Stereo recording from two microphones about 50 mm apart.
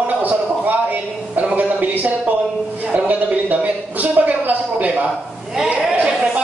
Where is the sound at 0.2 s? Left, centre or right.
Right.